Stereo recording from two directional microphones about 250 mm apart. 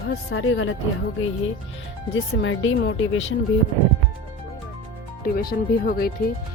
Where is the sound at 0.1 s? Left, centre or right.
Left.